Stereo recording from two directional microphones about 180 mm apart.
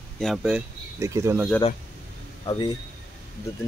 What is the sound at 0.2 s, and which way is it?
Speech, centre (ahead or behind).